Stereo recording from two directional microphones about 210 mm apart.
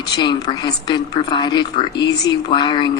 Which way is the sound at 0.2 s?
20° left (ahead or behind).